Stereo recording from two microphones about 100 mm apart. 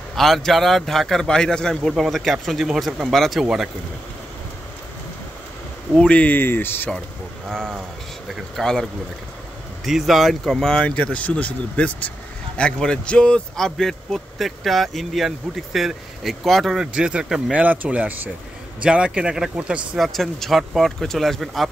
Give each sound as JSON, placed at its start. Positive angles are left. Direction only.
{"t": 0.1, "sound": "speech", "side_deg": 5}
{"t": 5.9, "sound": "speech", "side_deg": 10}
{"t": 7.4, "sound": "speech", "side_deg": 5}
{"t": 9.8, "sound": "a man's voice", "side_deg": 0}
{"t": 20.0, "sound": "speech", "side_deg": 0}